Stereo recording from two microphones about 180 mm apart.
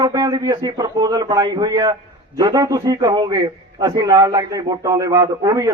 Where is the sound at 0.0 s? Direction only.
20° right (ahead or behind).